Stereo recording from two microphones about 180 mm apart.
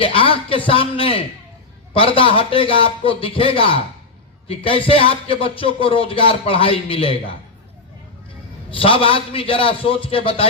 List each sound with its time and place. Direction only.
0.0 s a man's voice: 30° left (ahead or behind)
8.7 s speech: 30° left (ahead or behind)